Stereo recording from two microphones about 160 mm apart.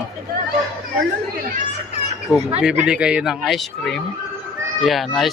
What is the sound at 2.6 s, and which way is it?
Speech, 5° right (ahead or behind).